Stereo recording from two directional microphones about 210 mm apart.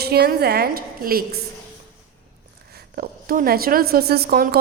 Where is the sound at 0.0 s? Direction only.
50° right (ahead or behind).